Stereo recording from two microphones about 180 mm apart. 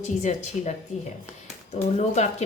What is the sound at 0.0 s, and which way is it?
Speech, 40° left (ahead or behind).